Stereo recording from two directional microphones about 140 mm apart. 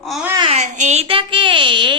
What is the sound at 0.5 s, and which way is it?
Speech, 60° right (ahead or behind).